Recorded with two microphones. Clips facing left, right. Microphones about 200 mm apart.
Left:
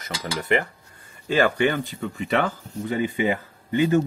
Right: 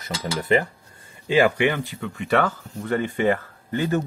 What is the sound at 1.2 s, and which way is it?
Speech, 15° right (ahead or behind).